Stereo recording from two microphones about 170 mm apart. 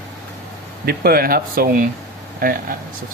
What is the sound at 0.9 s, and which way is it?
Speech, 60° right (ahead or behind).